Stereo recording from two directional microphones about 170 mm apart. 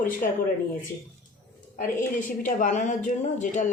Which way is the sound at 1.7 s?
50° left (ahead or behind).